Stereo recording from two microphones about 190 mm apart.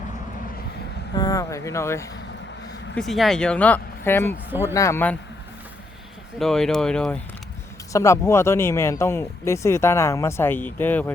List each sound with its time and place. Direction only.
1.1 s speech: 20° left (ahead or behind)
2.9 s speech: centre (ahead or behind)
6.4 s speech: centre (ahead or behind)
7.9 s speech: 15° left (ahead or behind)